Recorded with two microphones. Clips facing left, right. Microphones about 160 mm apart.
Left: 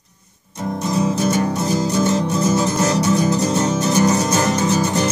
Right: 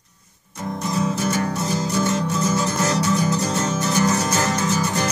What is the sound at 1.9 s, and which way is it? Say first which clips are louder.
Music: left 2 dB; 20° left (ahead or behind).